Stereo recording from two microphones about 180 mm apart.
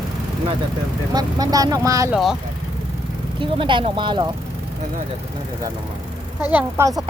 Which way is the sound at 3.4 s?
25° right (ahead or behind).